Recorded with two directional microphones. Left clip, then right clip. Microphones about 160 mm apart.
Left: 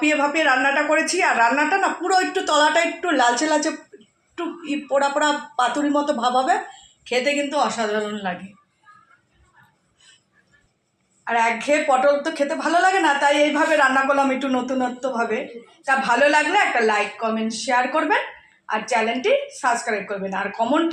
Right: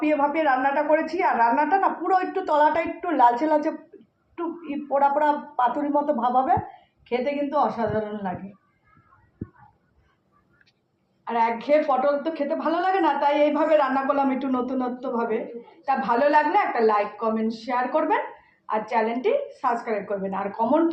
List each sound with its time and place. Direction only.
0.0 s a woman's voice: 65° left (ahead or behind)
4.9 s a woman's voice: 70° left (ahead or behind)
7.1 s a woman's voice: 60° left (ahead or behind)
11.3 s a woman's voice: 55° left (ahead or behind)